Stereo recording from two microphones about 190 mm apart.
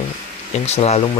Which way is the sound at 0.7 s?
35° left (ahead or behind).